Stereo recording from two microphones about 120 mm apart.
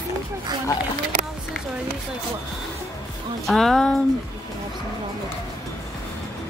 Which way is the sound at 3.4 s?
5° left (ahead or behind).